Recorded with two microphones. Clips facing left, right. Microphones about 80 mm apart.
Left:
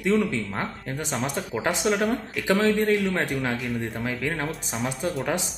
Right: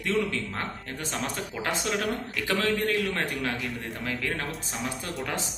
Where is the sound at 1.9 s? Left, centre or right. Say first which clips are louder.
Left 7 dB; centre.